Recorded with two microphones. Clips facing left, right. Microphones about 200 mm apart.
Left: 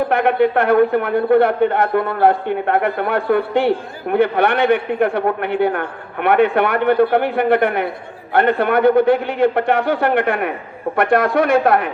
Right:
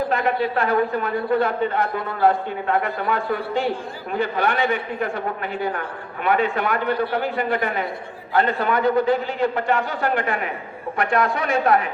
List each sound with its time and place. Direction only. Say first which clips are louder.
0.1 s a man's voice: left 7 dB; 60° left (ahead or behind)